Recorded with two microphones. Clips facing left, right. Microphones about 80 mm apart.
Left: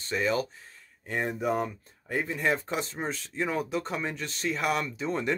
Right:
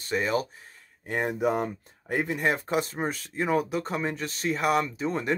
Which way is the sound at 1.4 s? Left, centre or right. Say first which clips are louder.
Right 2 dB; right.